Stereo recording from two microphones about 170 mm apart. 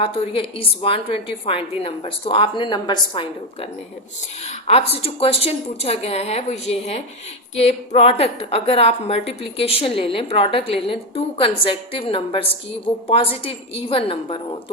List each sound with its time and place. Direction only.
0.0 s a woman's voice: 35° left (ahead or behind)
4.4 s a woman's voice: 40° left (ahead or behind)